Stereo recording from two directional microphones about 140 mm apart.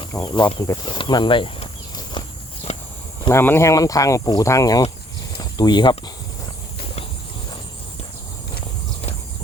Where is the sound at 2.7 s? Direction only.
50° left (ahead or behind).